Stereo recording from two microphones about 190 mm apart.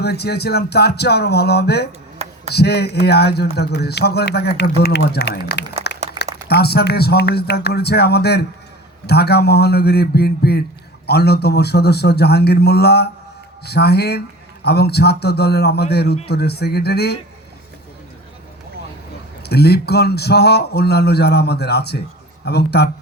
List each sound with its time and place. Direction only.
0.0 s speech: 60° left (ahead or behind)
5.9 s a sound: 60° left (ahead or behind)
6.5 s speech: 55° left (ahead or behind)
19.4 s speech: 60° left (ahead or behind)